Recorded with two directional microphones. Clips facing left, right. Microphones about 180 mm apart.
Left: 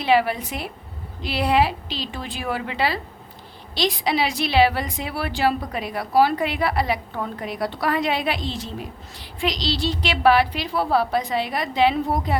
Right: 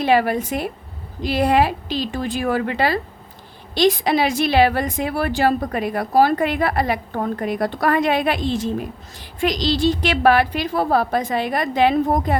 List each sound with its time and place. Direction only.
0.0 s a woman's voice: 45° right (ahead or behind)